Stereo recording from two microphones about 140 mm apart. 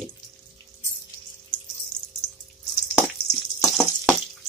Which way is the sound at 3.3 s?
5° left (ahead or behind).